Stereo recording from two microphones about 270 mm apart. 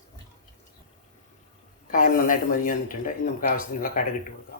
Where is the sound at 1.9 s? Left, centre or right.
Left.